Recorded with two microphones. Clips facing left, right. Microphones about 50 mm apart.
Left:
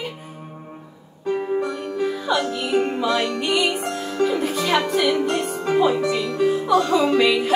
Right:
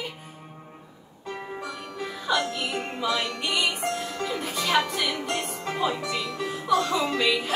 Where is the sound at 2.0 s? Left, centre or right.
Centre.